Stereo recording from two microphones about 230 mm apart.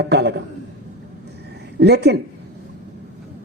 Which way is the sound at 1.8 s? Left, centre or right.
Right.